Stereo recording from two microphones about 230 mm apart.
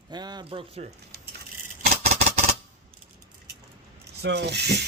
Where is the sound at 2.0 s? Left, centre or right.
Right.